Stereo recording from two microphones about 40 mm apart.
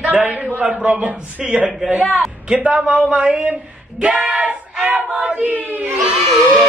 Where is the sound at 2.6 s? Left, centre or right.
Right.